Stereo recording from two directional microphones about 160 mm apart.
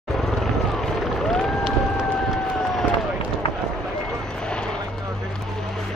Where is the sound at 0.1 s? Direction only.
Centre (ahead or behind).